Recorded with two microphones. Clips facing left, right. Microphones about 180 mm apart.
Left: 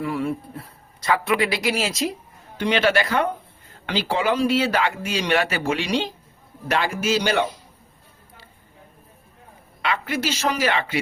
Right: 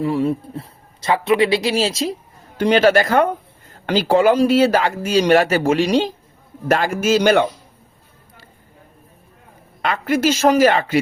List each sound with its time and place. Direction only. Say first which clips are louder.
0.0 s a man's voice: right 6 dB; 25° right (ahead or behind)
2.6 s speech: right 6 dB; 40° right (ahead or behind)
9.8 s speech: right 7 dB; 45° right (ahead or behind)